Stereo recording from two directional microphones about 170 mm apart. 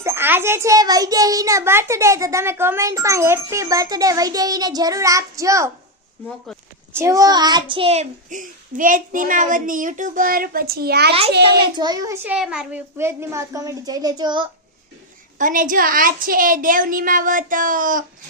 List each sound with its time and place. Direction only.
0.0 s a child's voice: 15° right (ahead or behind)
6.9 s a child's voice: 20° right (ahead or behind); by 11.5 s 75° right (ahead or behind)
11.8 s a child's voice: 25° right (ahead or behind)
12.2 s a child's voice: 5° right (ahead or behind); by 14.4 s 25° right (ahead or behind)
15.4 s a child's voice: 50° right (ahead or behind)